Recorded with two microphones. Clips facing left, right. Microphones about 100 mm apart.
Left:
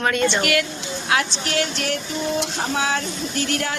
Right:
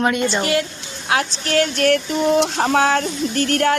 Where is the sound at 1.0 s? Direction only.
30° right (ahead or behind).